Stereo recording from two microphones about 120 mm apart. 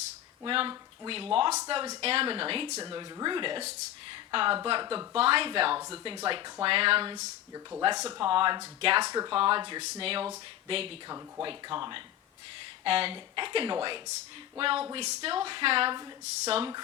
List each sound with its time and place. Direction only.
0.4 s speech: 45° right (ahead or behind)
2.8 s speech: 35° right (ahead or behind)
7.2 s speech: 30° right (ahead or behind)
8.2 s speech: 45° right (ahead or behind)
9.0 s speech: 35° right (ahead or behind)
9.3 s speech: 45° right (ahead or behind)
9.8 s speech: 60° right (ahead or behind)
11.4 s speech: 40° right (ahead or behind)
16.2 s speech: 60° right (ahead or behind)